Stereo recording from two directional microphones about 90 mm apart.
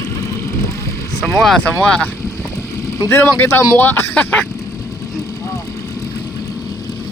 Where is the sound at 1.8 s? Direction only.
15° left (ahead or behind).